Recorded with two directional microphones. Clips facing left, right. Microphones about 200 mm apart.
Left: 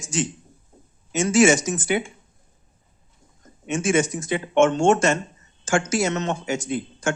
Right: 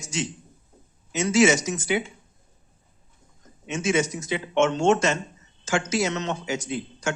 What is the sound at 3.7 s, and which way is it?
Speech, 50° left (ahead or behind).